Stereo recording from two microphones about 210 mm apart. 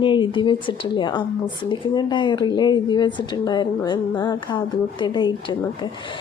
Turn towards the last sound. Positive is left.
turn(degrees=20)  # may be behind; listen again after turning